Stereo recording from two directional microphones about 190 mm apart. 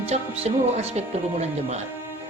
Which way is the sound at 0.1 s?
35° right (ahead or behind).